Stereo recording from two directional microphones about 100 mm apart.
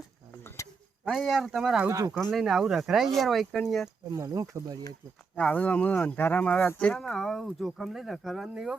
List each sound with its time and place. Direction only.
1.0 s speech: centre (ahead or behind)
1.9 s speech: 35° right (ahead or behind)
2.2 s speech: centre (ahead or behind)
4.1 s speech: 35° right (ahead or behind)
5.4 s speech: 15° left (ahead or behind); by 8.7 s 5° right (ahead or behind)